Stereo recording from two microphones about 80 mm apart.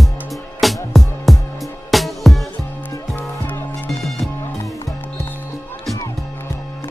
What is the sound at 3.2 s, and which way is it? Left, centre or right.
Music, left.